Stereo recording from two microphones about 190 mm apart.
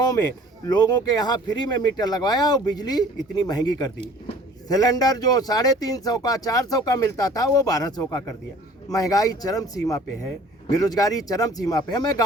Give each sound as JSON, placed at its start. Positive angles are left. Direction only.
{"t": 0.0, "sound": "speech", "side_deg": 20}